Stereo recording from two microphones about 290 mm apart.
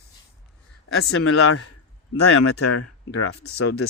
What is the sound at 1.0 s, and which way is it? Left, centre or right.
Speech, left.